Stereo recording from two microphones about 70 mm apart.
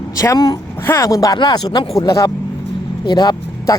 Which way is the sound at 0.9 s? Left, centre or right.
Left.